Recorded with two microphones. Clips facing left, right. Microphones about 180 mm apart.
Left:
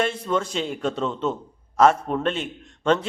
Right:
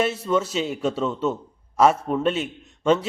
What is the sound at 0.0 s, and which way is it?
A man's voice, 5° right (ahead or behind).